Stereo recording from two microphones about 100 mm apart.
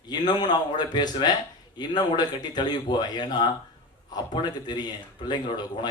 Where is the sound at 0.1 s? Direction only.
45° left (ahead or behind).